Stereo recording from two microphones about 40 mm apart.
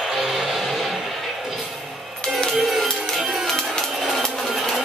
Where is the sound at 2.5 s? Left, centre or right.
Centre.